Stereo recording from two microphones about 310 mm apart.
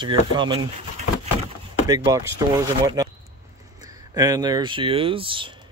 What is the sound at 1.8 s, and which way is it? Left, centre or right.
Speech, centre.